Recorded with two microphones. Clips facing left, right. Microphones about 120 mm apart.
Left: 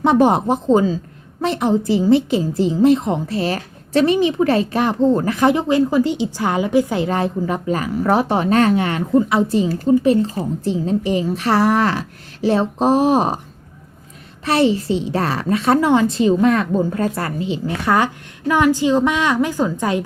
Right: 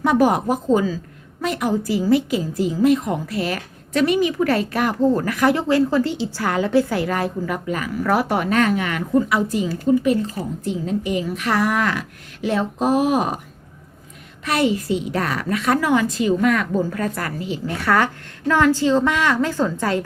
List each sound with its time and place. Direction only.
0.0 s a woman's voice: 25° left (ahead or behind)
14.4 s a woman's voice: 30° left (ahead or behind)